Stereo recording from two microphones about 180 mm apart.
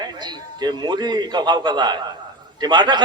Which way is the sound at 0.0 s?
25° right (ahead or behind).